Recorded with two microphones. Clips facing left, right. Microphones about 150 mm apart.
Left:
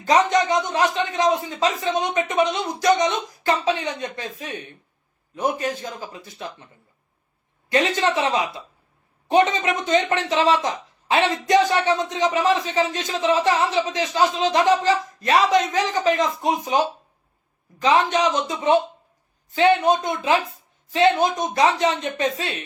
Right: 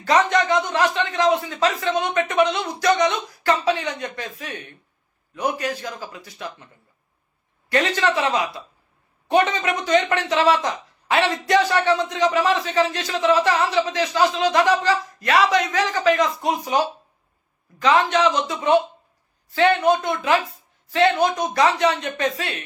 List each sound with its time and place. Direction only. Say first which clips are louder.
0.0 s a man's voice: even; 20° left (ahead or behind)
7.7 s a man's voice: even; 20° left (ahead or behind)
19.5 s a man's voice: even; 20° left (ahead or behind)